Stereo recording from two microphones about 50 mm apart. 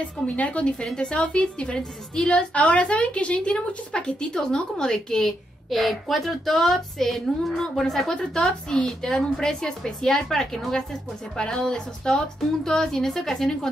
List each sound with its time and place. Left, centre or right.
0.4 s a woman's voice: left
5.7 s a woman's voice: centre